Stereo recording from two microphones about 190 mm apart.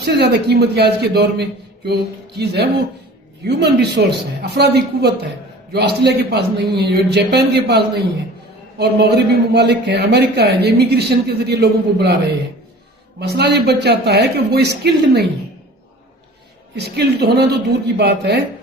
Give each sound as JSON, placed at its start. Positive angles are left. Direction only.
{"t": 0.0, "sound": "a man's voice", "side_deg": -60}
{"t": 16.7, "sound": "a man's voice", "side_deg": -60}